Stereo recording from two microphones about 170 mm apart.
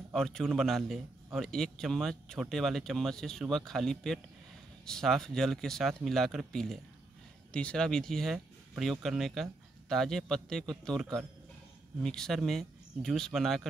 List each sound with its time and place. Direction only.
0.1 s a man's voice: 5° left (ahead or behind)